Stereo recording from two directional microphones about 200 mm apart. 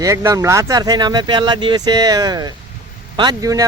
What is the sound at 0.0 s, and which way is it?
Speech, 15° right (ahead or behind).